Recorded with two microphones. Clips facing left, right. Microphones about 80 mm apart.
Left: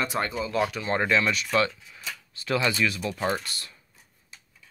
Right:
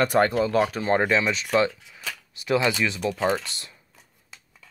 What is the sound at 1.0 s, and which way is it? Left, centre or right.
Speech, right.